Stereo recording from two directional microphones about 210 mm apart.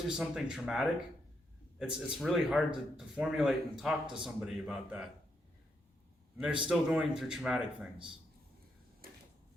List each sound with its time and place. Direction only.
0.2 s speech: 5° right (ahead or behind)
6.3 s a man's voice: 5° right (ahead or behind)
9.0 s a sound: 45° right (ahead or behind)